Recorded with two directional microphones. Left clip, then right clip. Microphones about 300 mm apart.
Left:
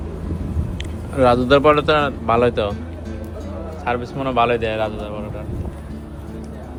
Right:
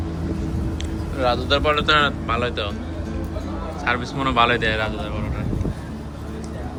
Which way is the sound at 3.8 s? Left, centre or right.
Centre.